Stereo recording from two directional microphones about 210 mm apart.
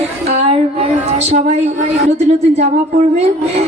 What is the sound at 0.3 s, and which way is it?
A woman's voice, 30° right (ahead or behind).